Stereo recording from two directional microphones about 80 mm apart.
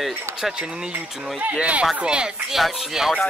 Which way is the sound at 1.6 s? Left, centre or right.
Centre.